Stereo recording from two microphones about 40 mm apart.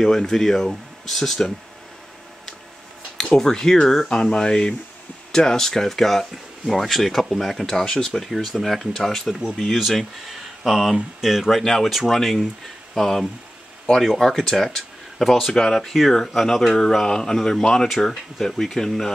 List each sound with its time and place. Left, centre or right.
0.0 s speech: centre
3.3 s speech: centre
9.6 s speech: centre
17.8 s speech: centre